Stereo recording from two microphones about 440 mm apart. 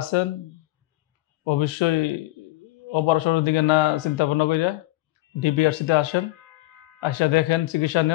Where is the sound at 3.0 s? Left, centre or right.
Left.